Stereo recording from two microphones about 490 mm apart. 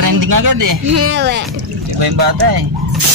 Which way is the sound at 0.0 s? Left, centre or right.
Right.